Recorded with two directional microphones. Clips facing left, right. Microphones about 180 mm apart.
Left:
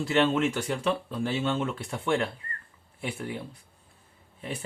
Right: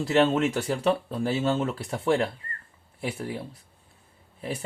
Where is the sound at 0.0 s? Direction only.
40° right (ahead or behind).